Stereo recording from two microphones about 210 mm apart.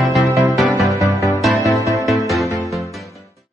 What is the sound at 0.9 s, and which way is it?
Music, 15° right (ahead or behind).